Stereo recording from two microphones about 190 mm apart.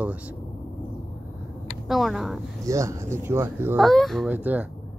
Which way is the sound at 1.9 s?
Centre (ahead or behind).